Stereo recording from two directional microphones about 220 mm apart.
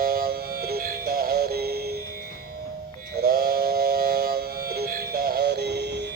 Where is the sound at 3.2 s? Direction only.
45° right (ahead or behind).